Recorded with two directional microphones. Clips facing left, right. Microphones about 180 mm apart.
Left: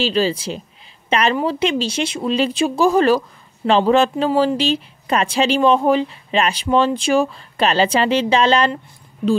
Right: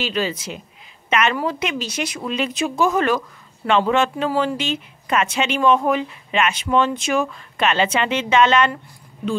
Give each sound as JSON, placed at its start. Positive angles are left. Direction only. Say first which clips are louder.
{"t": 0.0, "sound": "speech", "louder": "left 5 dB", "side_deg": 30}